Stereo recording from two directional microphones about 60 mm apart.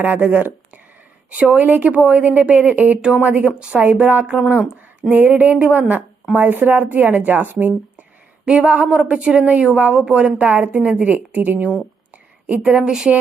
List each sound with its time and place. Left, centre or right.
0.0 s a woman's voice: right
3.5 s a woman's voice: centre
8.4 s a woman's voice: centre
12.6 s speech: centre